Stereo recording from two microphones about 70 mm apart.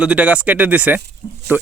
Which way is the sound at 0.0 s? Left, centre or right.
Centre.